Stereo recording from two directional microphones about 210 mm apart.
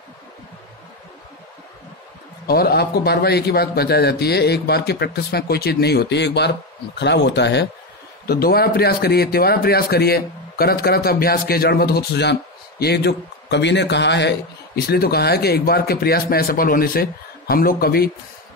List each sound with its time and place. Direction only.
2.4 s speech: 45° left (ahead or behind)